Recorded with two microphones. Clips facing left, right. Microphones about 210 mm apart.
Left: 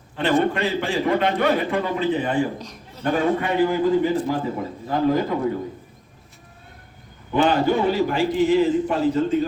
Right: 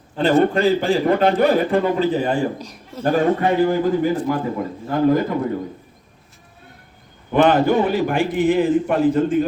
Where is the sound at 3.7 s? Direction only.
50° right (ahead or behind).